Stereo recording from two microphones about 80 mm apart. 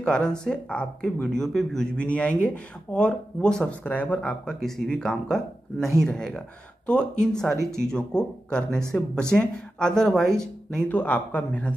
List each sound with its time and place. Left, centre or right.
0.0 s speech: centre
10.9 s speech: left